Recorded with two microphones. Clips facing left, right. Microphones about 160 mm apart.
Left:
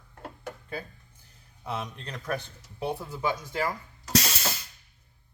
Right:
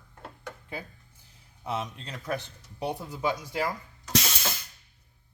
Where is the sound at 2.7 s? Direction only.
15° right (ahead or behind).